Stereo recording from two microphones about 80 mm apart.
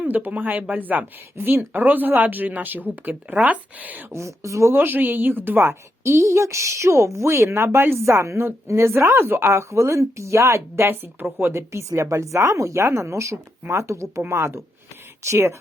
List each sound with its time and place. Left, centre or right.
0.0 s speech: centre
4.1 s a woman's voice: right